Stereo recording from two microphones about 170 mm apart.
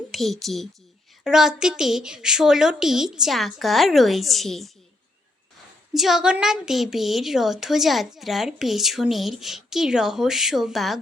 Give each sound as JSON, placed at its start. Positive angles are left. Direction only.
{"t": 0.1, "sound": "a woman's voice", "side_deg": 0}
{"t": 5.9, "sound": "a woman's voice", "side_deg": 0}